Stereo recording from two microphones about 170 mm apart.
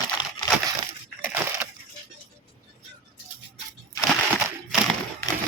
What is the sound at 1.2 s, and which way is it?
Splinter, 10° right (ahead or behind).